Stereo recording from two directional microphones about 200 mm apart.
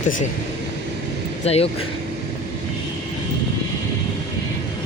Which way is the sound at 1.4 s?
30° left (ahead or behind).